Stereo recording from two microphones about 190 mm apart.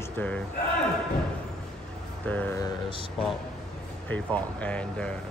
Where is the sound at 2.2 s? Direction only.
10° left (ahead or behind).